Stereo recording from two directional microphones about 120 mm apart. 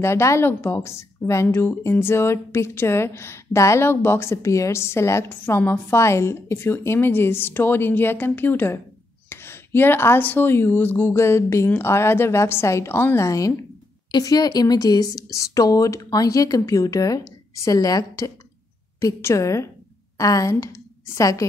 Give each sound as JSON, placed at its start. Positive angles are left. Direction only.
{"t": 0.0, "sound": "a woman's voice", "side_deg": 25}